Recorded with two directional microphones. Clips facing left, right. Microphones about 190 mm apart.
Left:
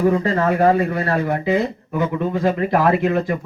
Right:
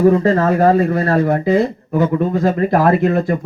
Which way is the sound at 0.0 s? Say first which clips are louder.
Right 5 dB; 40° right (ahead or behind).